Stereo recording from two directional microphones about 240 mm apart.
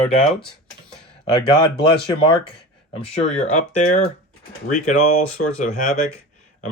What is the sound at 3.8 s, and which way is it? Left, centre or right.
Speech, left.